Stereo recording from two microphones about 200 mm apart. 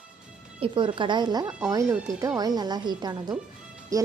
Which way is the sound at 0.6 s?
25° right (ahead or behind).